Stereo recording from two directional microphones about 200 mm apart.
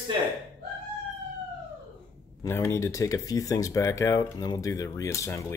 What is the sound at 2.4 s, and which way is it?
Speech, 15° left (ahead or behind).